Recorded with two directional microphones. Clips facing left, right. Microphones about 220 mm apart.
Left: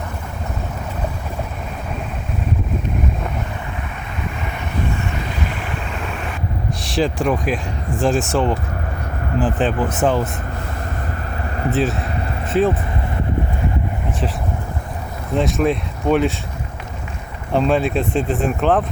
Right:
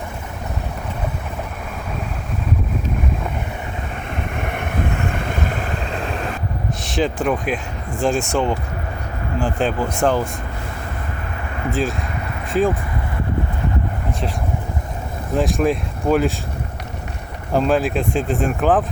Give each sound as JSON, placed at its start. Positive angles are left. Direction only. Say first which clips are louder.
{"t": 4.4, "sound": "vehicle", "louder": "right 2 dB", "side_deg": -55}
{"t": 6.8, "sound": "speech", "louder": "left 1 dB", "side_deg": 0}
{"t": 11.7, "sound": "speech", "louder": "left 2 dB", "side_deg": 0}
{"t": 15.4, "sound": "speech", "louder": "even", "side_deg": 0}
{"t": 17.5, "sound": "speech", "louder": "even", "side_deg": 0}